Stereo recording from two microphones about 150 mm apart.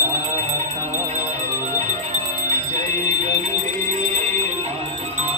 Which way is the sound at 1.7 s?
50° right (ahead or behind).